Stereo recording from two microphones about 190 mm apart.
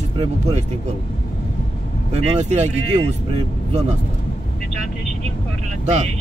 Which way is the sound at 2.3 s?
35° right (ahead or behind).